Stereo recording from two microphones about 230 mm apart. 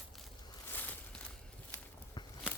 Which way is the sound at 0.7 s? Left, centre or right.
Centre.